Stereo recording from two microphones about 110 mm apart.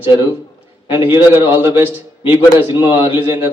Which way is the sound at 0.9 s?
20° right (ahead or behind).